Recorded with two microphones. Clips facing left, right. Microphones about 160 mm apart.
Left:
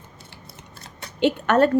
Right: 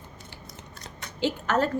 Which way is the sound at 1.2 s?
65° left (ahead or behind).